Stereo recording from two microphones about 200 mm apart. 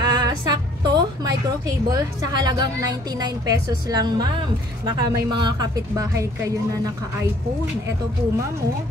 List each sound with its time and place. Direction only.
0.0 s a woman's voice: 20° right (ahead or behind)